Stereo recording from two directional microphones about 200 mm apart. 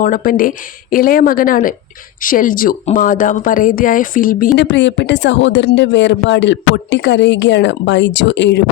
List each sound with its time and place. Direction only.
0.0 s speech: 45° left (ahead or behind)
4.5 s speech: 60° left (ahead or behind)